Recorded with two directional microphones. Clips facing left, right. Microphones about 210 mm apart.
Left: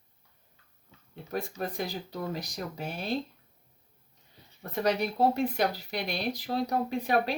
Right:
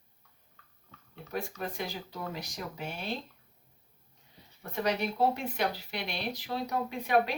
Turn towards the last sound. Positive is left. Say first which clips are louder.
# left 1 dB
turn(degrees=40)  # may be behind; listen again after turning